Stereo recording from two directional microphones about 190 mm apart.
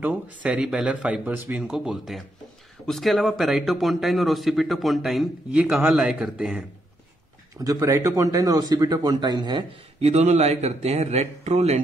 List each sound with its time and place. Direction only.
0.0 s a man's voice: 5° right (ahead or behind)
7.5 s a man's voice: 20° right (ahead or behind)